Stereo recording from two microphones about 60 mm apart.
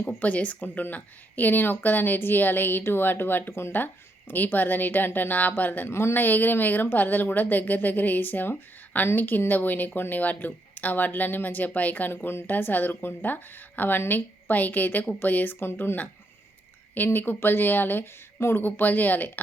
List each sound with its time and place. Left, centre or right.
0.2 s a woman's voice: left
5.9 s a woman's voice: left
18.6 s a woman's voice: left